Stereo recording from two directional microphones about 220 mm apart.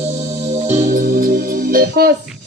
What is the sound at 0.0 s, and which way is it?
Music, 30° right (ahead or behind).